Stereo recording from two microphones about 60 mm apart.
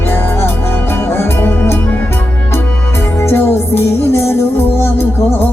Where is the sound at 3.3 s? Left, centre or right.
Left.